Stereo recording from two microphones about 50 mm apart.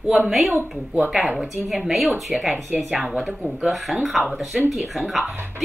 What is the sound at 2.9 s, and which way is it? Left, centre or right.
Speech, centre.